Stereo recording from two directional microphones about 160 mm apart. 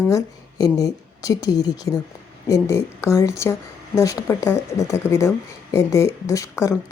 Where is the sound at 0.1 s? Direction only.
20° left (ahead or behind).